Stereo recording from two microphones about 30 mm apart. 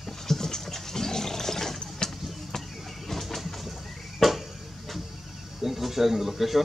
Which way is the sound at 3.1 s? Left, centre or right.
Centre.